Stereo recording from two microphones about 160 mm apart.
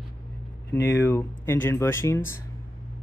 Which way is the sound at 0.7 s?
15° left (ahead or behind).